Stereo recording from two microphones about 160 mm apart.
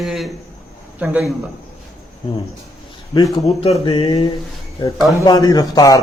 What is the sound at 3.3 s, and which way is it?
Speech, 35° left (ahead or behind).